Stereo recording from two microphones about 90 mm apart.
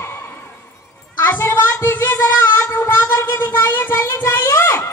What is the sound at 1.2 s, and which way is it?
Music, 25° left (ahead or behind).